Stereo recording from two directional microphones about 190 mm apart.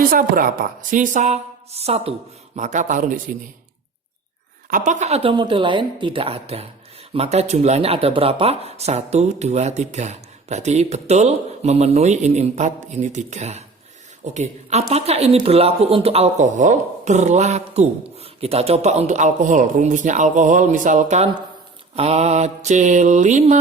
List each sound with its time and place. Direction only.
0.1 s speech: 50° right (ahead or behind)
4.7 s speech: 40° right (ahead or behind)